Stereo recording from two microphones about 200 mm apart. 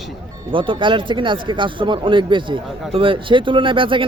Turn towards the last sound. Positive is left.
turn(degrees=-25)  # may be behind; listen again after turning